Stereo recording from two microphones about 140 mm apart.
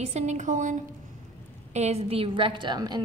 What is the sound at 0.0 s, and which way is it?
A woman's voice, 55° right (ahead or behind).